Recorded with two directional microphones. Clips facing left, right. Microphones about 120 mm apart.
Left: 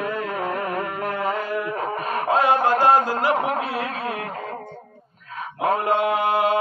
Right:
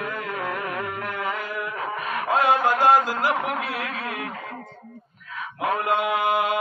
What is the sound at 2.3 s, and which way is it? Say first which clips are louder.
Mantra: left 2 dB; 35° left (ahead or behind).